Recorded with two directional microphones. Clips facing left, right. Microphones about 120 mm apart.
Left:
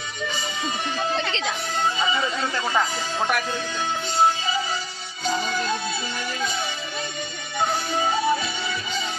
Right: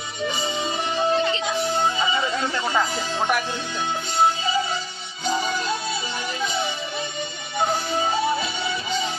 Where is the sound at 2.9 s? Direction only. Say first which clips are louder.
Right 1 dB; 20° right (ahead or behind).